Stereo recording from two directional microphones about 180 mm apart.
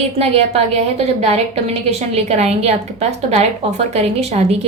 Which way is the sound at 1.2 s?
35° right (ahead or behind).